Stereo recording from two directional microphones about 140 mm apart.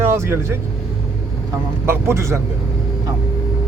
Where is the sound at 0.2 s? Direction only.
15° right (ahead or behind).